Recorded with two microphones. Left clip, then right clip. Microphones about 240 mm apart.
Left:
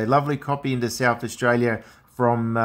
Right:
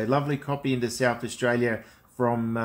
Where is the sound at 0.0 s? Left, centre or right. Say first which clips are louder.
Left 5 dB; left.